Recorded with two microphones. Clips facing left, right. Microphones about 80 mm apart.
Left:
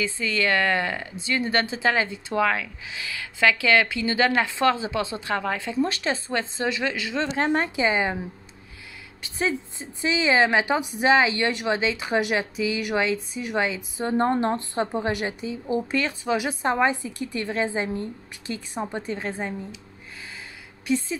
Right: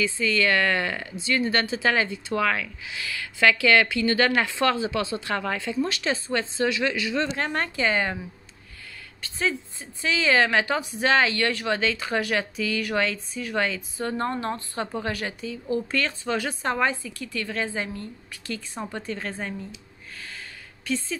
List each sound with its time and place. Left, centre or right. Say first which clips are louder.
0.0 s speech: right 1 dB; left
5.9 s speech: even; left
7.5 s a woman's voice: even; centre
9.2 s speech: left 1 dB; centre
20.8 s a woman's voice: left 4 dB; centre